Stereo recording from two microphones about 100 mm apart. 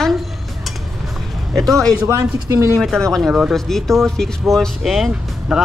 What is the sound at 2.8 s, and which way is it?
Speech, 5° left (ahead or behind).